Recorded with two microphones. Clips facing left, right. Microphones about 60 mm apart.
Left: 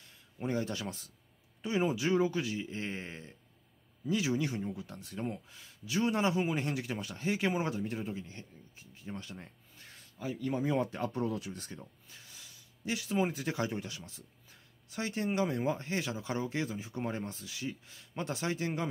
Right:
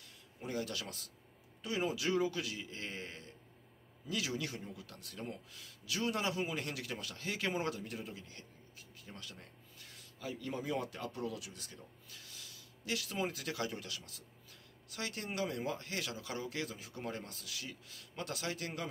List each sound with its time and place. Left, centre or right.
0.0 s a man's voice: left
10.2 s speech: left